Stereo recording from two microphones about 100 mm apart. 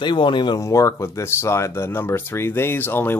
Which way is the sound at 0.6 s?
30° left (ahead or behind).